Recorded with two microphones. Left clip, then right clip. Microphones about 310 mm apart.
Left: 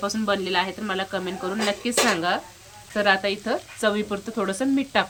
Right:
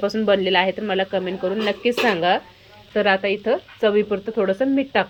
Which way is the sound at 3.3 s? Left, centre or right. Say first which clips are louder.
Right 6 dB; left.